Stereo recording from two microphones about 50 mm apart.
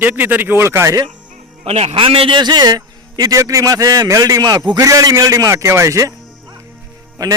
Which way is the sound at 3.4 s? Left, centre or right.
Right.